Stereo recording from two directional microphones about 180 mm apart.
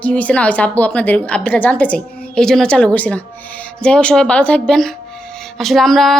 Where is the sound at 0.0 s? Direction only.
10° left (ahead or behind).